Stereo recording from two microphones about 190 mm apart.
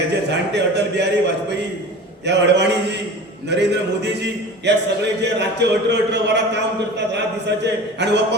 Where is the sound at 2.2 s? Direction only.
65° right (ahead or behind).